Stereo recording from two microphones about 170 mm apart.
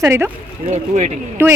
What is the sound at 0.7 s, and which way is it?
Speech, 40° right (ahead or behind).